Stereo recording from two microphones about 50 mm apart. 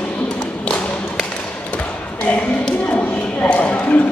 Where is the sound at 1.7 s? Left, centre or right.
Left.